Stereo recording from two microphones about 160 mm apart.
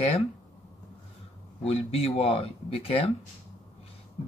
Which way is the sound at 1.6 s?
40° left (ahead or behind).